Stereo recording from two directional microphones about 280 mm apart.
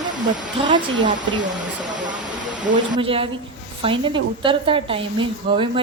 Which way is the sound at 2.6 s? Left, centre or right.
Right.